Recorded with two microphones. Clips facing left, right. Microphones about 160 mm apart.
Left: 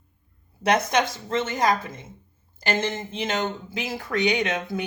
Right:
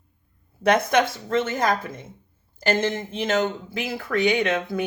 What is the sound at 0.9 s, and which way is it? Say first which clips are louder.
Speech: right 3 dB; 55° right (ahead or behind).